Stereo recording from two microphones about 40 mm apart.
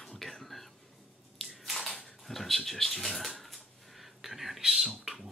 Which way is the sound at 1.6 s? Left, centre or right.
Centre.